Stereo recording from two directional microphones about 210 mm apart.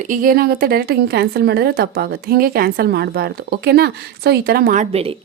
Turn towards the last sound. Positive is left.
turn(degrees=-30)  # may be behind; listen again after turning